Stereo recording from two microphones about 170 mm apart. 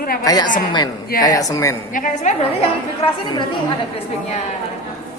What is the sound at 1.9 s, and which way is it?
Speech, 50° left (ahead or behind).